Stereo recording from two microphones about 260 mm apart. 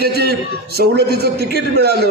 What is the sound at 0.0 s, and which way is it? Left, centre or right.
A man's voice, right.